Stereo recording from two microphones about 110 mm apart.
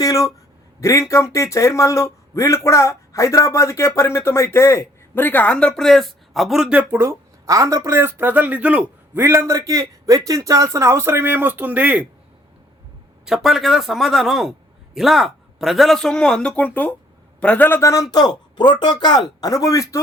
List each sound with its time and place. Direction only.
0.0 s speech: 30° left (ahead or behind); by 6.8 s 5° right (ahead or behind)
6.9 s speech: 25° right (ahead or behind)
9.2 s a man's voice: 25° right (ahead or behind)
13.2 s a man's voice: centre (ahead or behind); by 17.7 s 15° left (ahead or behind)
17.7 s speech: 30° left (ahead or behind)
18.1 s speech: 40° left (ahead or behind)